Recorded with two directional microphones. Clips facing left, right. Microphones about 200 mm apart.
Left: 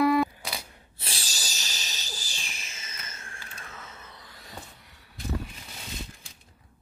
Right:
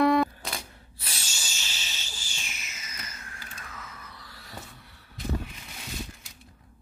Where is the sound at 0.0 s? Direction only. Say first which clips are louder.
Right 1 dB; 5° left (ahead or behind).